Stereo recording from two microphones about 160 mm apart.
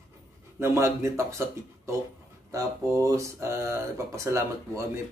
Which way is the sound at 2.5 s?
20° right (ahead or behind).